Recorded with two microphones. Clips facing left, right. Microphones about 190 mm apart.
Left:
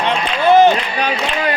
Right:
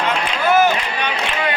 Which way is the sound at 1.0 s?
40° left (ahead or behind).